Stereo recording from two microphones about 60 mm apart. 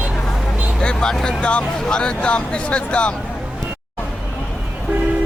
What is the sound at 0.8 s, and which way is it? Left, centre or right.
Speech, centre.